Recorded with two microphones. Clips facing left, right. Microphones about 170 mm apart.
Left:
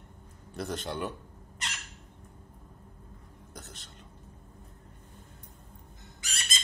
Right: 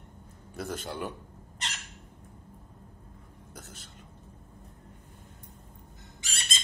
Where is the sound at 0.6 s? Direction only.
5° right (ahead or behind).